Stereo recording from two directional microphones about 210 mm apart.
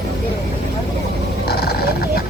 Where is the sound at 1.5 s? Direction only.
50° left (ahead or behind).